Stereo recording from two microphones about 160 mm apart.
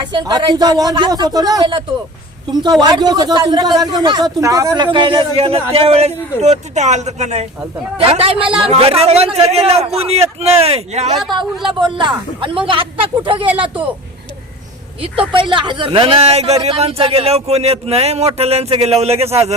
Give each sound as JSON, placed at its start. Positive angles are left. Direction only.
{"t": 0.1, "sound": "speech", "side_deg": -25}
{"t": 2.8, "sound": "speech", "side_deg": -25}
{"t": 11.6, "sound": "speech", "side_deg": -30}
{"t": 15.3, "sound": "speech", "side_deg": -30}